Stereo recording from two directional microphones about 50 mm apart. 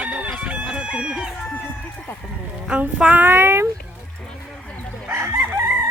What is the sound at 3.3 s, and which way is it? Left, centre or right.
Speech, right.